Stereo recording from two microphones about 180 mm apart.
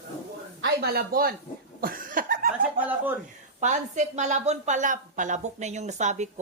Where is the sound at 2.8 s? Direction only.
10° right (ahead or behind).